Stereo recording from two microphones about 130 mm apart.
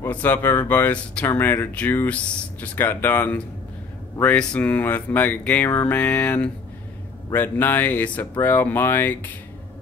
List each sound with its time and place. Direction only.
0.0 s speech: 15° left (ahead or behind)